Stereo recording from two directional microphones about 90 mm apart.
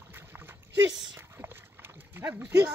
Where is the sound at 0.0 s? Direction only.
25° right (ahead or behind).